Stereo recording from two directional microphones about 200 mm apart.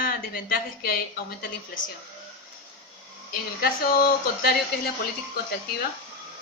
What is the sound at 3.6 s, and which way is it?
Speech, 50° left (ahead or behind).